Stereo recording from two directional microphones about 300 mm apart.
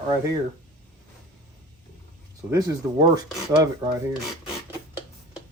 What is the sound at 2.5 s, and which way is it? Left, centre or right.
Speech, centre.